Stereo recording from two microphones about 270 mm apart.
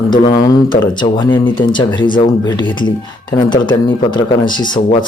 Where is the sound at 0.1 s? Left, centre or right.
Centre.